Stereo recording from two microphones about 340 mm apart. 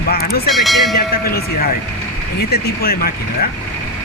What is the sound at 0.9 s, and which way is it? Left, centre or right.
Speech, left.